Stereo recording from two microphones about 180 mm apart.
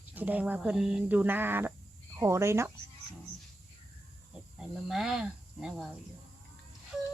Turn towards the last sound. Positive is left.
turn(degrees=-5)  # may be behind; listen again after turning